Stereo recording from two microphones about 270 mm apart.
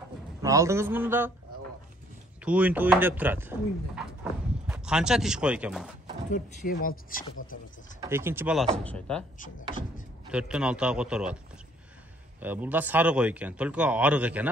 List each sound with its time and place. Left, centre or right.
0.4 s a man's voice: centre
2.4 s speech: centre
6.7 s speech: left
8.0 s a man's voice: centre
10.3 s a man's voice: centre
12.4 s a man's voice: centre